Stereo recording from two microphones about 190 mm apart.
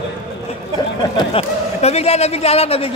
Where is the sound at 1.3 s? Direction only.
35° left (ahead or behind).